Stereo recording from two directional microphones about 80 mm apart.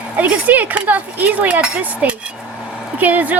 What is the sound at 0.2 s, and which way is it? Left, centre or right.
Speech, centre.